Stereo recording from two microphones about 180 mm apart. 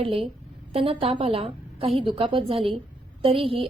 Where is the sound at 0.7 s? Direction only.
30° right (ahead or behind).